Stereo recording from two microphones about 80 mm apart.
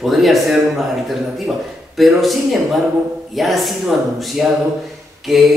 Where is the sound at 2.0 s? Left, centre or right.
Centre.